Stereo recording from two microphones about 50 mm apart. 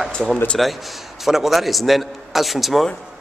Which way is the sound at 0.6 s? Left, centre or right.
Centre.